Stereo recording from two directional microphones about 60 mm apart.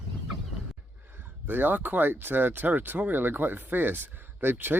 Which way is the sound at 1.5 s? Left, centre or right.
Right.